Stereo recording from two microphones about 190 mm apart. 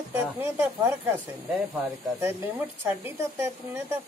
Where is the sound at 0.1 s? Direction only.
10° right (ahead or behind).